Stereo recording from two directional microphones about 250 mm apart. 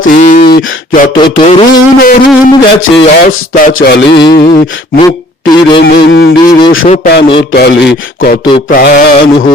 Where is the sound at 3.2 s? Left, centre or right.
Left.